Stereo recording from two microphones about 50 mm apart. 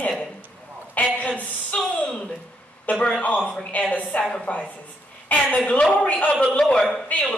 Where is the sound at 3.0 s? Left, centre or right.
Left.